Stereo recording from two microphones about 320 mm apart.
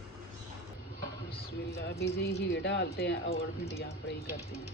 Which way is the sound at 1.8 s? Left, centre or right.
Left.